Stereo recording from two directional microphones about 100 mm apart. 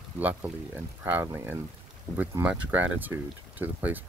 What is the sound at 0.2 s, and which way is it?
Speech, 15° right (ahead or behind).